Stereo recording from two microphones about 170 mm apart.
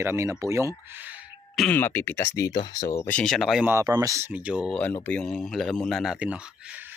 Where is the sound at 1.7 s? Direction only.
10° left (ahead or behind).